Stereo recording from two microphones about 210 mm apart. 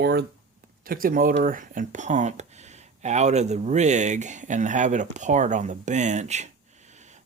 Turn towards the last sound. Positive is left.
turn(degrees=-35)  # may be behind; listen again after turning